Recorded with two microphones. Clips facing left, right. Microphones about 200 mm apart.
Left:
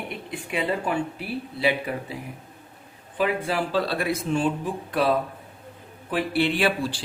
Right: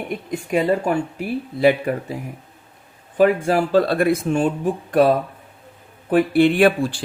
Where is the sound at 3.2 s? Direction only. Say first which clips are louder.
Right 8 dB; 45° right (ahead or behind).